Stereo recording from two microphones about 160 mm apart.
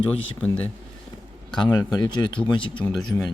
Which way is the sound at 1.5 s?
25° left (ahead or behind).